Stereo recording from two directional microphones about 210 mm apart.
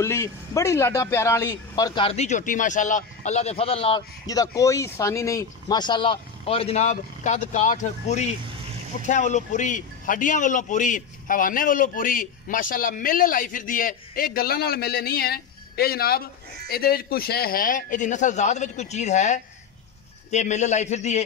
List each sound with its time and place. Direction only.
0.0 s a man's voice: 15° left (ahead or behind); by 21.2 s 35° left (ahead or behind)